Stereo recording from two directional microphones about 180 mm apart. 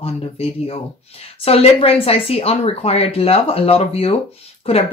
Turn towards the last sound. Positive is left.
turn(degrees=35)  # may be behind; listen again after turning